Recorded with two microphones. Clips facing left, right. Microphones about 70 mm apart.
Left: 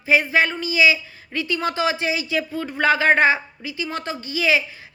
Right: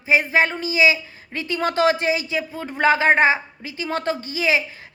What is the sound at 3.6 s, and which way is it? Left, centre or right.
Speech, right.